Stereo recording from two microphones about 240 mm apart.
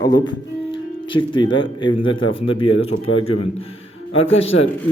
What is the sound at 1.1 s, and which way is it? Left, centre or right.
A man's voice, centre.